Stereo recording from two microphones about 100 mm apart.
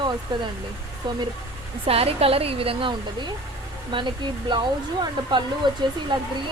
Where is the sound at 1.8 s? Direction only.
75° right (ahead or behind).